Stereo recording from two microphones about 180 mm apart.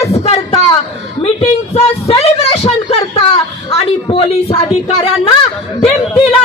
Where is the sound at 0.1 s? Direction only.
35° left (ahead or behind).